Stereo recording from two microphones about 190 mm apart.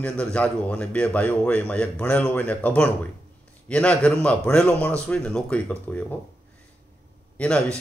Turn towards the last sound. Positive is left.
turn(degrees=5)  # may be behind; listen again after turning